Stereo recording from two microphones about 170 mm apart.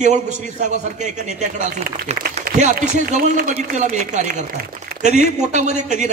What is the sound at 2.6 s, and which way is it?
A man's voice, 45° right (ahead or behind).